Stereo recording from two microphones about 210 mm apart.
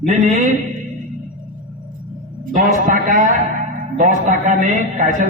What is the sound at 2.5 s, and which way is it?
A man's voice, 40° right (ahead or behind).